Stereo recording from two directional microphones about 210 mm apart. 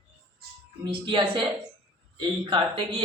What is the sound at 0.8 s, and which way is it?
A woman's voice, 25° right (ahead or behind).